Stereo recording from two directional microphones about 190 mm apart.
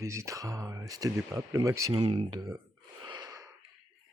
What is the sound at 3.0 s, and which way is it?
Wheeze, 20° right (ahead or behind).